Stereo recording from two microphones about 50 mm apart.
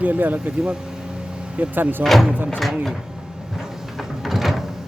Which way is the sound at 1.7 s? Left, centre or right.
Right.